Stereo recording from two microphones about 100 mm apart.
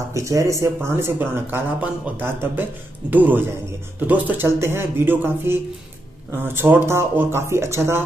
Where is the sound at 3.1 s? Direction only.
15° right (ahead or behind).